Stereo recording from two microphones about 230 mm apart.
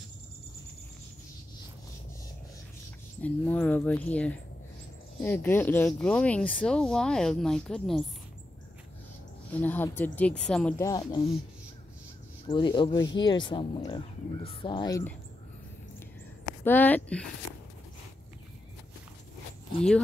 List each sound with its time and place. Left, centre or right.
3.2 s speech: centre
9.5 s speech: centre
10.9 s speech: centre
12.4 s speech: left
16.6 s speech: centre